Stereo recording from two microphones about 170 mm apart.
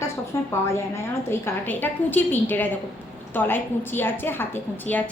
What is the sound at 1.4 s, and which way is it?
A woman's voice, 10° left (ahead or behind).